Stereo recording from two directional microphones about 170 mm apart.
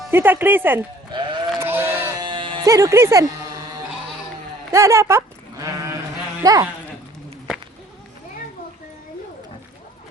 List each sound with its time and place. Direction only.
0.1 s speech: 10° right (ahead or behind)
1.1 s sheep: 25° right (ahead or behind)
1.5 s sheep: 15° right (ahead or behind)
2.2 s music: 30° right (ahead or behind)
4.7 s sheep: 15° right (ahead or behind)
6.4 s speech: 20° right (ahead or behind)